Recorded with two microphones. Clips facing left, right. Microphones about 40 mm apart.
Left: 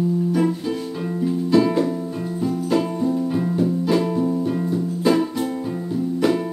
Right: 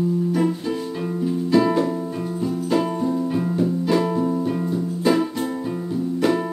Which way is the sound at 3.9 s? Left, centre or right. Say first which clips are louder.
Even; centre.